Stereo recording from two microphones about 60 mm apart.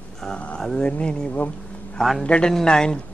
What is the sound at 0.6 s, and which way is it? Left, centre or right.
A man's voice, centre.